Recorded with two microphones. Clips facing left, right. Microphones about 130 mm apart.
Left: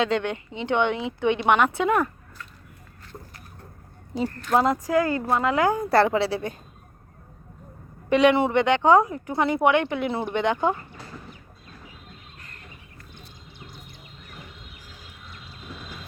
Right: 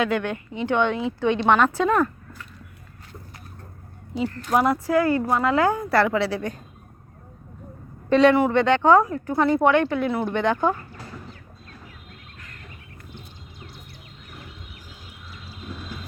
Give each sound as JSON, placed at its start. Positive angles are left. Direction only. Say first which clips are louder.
{"t": 0.0, "sound": "a woman's voice", "louder": "even", "side_deg": 20}
{"t": 4.5, "sound": "a woman's voice", "louder": "right 1 dB", "side_deg": 20}
{"t": 8.1, "sound": "speech", "louder": "right 2 dB", "side_deg": 15}
{"t": 15.3, "sound": "a sound", "louder": "right 4 dB", "side_deg": -5}